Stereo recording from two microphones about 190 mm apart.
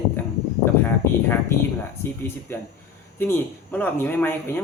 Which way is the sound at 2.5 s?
10° left (ahead or behind).